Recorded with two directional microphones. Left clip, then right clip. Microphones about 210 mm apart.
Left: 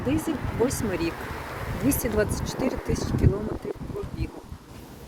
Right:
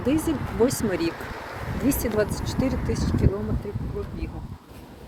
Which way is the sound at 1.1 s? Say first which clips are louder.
Even; 40° left (ahead or behind).